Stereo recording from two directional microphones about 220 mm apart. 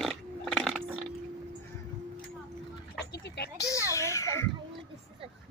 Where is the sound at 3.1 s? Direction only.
45° left (ahead or behind).